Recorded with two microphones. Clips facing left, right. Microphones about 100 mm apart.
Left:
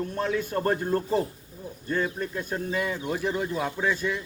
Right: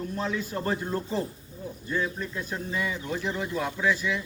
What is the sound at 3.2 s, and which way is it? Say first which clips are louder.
Speech: left 3 dB; 10° left (ahead or behind).